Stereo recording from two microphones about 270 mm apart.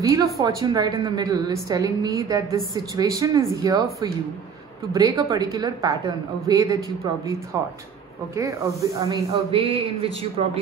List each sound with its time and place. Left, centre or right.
0.0 s a woman's voice: centre
9.0 s a man's voice: right